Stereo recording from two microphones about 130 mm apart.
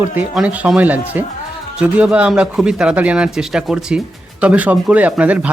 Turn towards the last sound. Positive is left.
turn(degrees=-10)  # may be behind; listen again after turning